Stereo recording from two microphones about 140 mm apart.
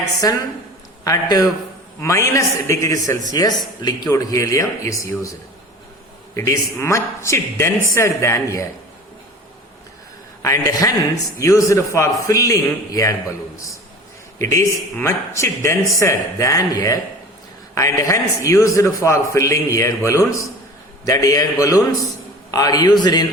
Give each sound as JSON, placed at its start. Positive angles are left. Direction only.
{"t": 0.2, "sound": "a man's voice", "side_deg": 25}
{"t": 6.3, "sound": "a man's voice", "side_deg": 20}
{"t": 10.4, "sound": "a man's voice", "side_deg": 25}
{"t": 14.3, "sound": "a man's voice", "side_deg": 20}